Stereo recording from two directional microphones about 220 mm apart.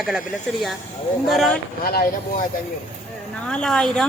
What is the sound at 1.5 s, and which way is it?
Speech, 40° left (ahead or behind).